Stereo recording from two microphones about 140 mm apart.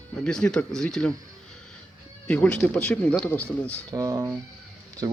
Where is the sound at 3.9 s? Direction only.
25° right (ahead or behind).